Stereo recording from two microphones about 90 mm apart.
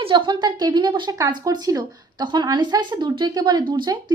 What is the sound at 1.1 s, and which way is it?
Speech, 40° right (ahead or behind).